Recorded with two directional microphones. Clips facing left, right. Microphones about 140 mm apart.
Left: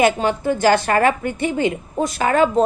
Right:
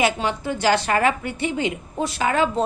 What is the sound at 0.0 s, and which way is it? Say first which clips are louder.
A woman's voice: left 5 dB; 50° left (ahead or behind).